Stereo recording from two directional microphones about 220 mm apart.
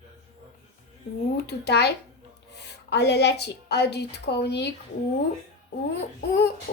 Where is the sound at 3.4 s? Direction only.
50° left (ahead or behind).